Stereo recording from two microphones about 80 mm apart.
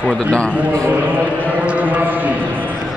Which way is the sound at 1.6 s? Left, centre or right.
Centre.